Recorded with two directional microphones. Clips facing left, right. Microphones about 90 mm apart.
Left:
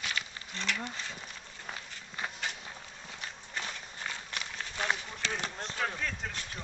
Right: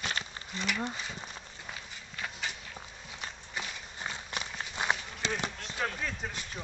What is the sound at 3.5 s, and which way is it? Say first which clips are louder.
Run: left 1 dB; 20° right (ahead or behind).